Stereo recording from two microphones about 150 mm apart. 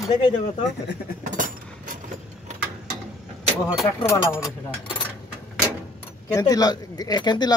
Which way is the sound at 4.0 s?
20° left (ahead or behind).